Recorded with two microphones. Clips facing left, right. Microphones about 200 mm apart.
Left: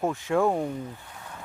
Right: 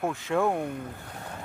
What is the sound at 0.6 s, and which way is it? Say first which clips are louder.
Speech: left 2 dB; 60° right (ahead or behind).